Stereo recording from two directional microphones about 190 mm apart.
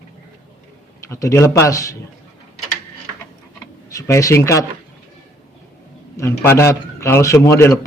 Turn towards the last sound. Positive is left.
turn(degrees=15)  # may be behind; listen again after turning